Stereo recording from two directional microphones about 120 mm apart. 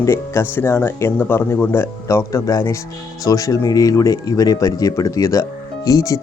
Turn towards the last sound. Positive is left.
turn(degrees=30)  # may be behind; listen again after turning